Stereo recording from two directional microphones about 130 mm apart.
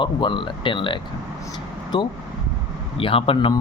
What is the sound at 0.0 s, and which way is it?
Speech, 40° left (ahead or behind).